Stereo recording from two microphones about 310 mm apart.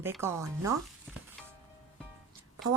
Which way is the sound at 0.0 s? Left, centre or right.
Centre.